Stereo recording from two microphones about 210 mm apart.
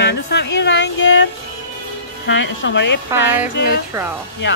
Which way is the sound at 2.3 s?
60° left (ahead or behind).